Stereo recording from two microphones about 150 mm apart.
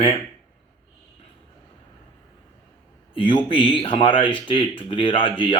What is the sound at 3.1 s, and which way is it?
A man's voice, 35° left (ahead or behind).